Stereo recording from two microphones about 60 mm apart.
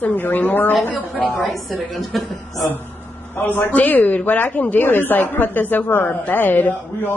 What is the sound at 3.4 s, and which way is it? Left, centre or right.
Speech, left.